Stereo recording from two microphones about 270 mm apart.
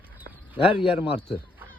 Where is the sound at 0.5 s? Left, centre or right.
Centre.